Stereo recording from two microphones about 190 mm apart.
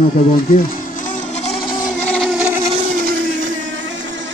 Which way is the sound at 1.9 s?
Centre (ahead or behind).